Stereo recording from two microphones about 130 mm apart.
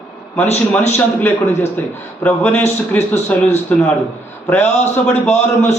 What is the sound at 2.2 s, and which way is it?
A man's voice, 10° left (ahead or behind).